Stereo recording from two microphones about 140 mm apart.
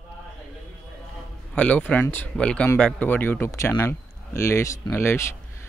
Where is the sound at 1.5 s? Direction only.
10° left (ahead or behind).